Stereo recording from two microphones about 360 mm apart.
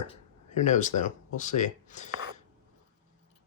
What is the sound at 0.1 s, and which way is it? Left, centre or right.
Speech, centre.